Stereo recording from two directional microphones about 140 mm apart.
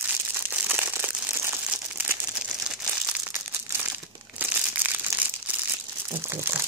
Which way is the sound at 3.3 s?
20° right (ahead or behind).